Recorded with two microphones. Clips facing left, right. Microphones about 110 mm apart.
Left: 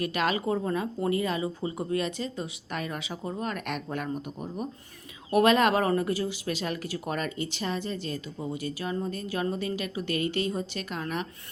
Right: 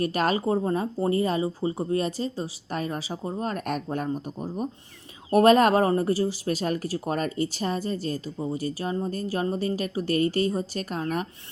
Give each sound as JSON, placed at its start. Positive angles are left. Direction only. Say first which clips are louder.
{"t": 0.0, "sound": "speech", "louder": "right 3 dB", "side_deg": -40}